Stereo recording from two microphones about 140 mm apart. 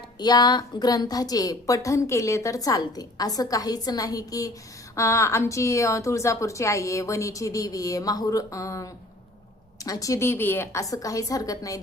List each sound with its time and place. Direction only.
0.2 s a woman's voice: 30° left (ahead or behind)